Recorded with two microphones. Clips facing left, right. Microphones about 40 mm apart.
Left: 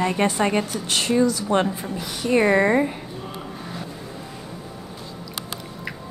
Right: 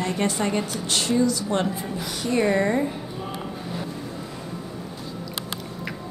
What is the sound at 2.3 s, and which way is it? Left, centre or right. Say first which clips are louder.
Speech: left 4 dB; left.